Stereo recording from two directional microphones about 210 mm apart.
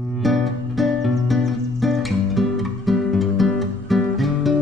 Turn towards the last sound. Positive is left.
turn(degrees=0)  # may be behind; listen again after turning